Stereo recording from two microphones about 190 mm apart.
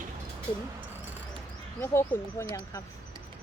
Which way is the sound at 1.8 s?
10° left (ahead or behind).